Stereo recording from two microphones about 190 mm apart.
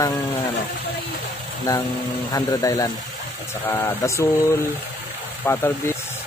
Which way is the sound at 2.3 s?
20° left (ahead or behind).